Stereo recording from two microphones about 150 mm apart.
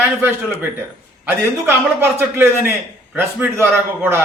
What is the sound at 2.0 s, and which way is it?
A man's voice, 15° right (ahead or behind).